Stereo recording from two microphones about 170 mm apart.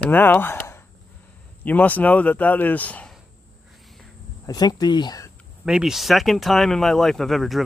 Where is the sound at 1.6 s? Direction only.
10° left (ahead or behind).